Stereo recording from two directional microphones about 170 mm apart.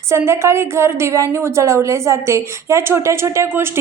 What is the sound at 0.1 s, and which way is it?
A woman's voice, 15° right (ahead or behind).